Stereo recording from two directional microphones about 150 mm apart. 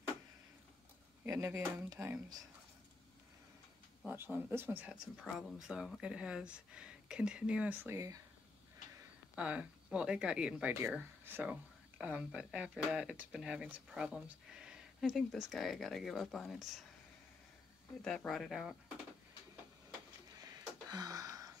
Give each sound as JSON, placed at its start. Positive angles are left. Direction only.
{"t": 1.2, "sound": "speech", "side_deg": -20}
{"t": 4.1, "sound": "speech", "side_deg": -15}
{"t": 5.1, "sound": "speech", "side_deg": 0}
{"t": 9.3, "sound": "speech", "side_deg": -10}
{"t": 18.0, "sound": "speech", "side_deg": 5}
{"t": 20.3, "sound": "a sound", "side_deg": -25}